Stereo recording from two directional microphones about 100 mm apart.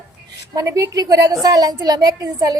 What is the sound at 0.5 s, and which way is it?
A woman's voice, 30° right (ahead or behind).